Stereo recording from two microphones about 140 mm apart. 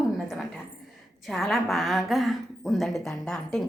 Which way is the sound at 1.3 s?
Centre (ahead or behind).